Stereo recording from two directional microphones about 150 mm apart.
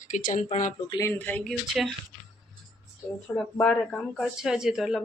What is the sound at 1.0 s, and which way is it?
Speech, 15° left (ahead or behind).